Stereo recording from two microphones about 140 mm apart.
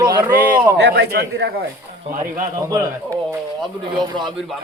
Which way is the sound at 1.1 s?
90° right.